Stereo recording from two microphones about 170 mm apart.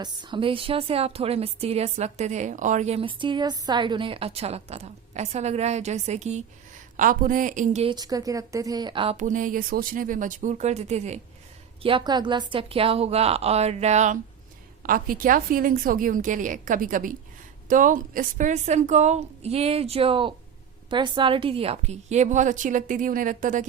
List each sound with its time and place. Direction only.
0.0 s a woman's voice: 25° right (ahead or behind)
6.9 s a woman's voice: 50° right (ahead or behind)
7.9 s speech: 25° right (ahead or behind)
9.1 s a woman's voice: 50° right (ahead or behind)
11.8 s a woman's voice: 30° right (ahead or behind)
14.8 s a woman's voice: 55° right (ahead or behind)